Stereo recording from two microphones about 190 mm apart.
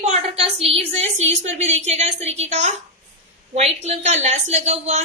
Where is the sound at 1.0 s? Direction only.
35° right (ahead or behind).